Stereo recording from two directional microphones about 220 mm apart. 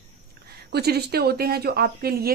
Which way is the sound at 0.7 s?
45° right (ahead or behind).